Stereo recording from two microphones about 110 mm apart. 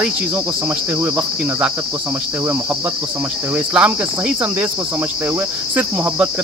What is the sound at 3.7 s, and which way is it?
Cricket, 10° right (ahead or behind).